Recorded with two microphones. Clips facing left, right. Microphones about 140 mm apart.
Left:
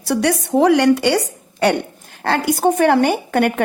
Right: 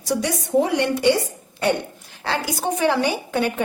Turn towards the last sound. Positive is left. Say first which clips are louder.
# left 6 dB
turn(degrees=60)  # may be behind; listen again after turning